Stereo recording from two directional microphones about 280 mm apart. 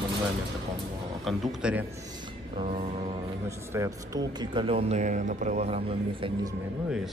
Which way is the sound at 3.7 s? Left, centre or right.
Centre.